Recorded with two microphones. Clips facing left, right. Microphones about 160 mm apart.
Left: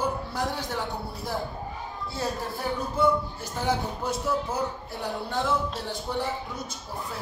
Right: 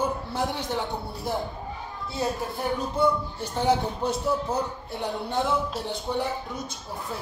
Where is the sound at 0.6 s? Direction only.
20° right (ahead or behind).